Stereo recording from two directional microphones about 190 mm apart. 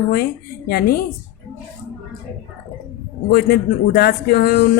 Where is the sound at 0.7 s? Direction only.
55° left (ahead or behind).